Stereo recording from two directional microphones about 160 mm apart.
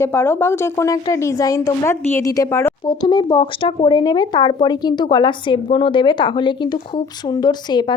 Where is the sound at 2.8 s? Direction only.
30° left (ahead or behind).